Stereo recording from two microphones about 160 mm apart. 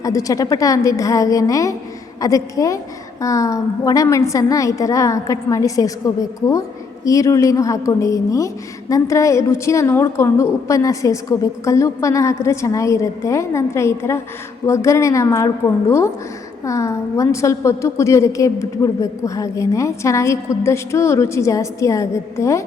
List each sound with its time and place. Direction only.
0.0 s a woman's voice: 20° left (ahead or behind)